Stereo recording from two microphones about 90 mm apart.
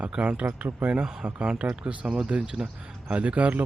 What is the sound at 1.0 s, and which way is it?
Speech, 5° right (ahead or behind).